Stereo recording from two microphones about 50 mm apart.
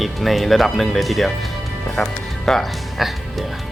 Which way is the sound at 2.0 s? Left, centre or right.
Centre.